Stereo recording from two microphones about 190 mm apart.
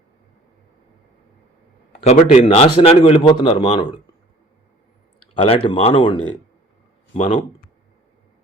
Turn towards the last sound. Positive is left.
turn(degrees=35)  # may be behind; listen again after turning